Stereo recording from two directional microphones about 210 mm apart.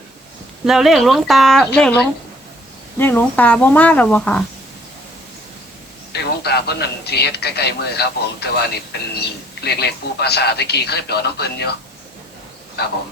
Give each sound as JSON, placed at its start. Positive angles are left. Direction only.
{"t": 0.6, "sound": "speech", "side_deg": 0}
{"t": 3.0, "sound": "speech", "side_deg": 10}
{"t": 6.1, "sound": "a man's voice", "side_deg": 50}